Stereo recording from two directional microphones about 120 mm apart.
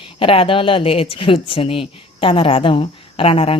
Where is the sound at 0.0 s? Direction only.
50° left (ahead or behind).